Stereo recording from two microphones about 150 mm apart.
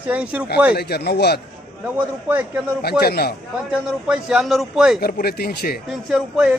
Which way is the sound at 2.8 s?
90° left.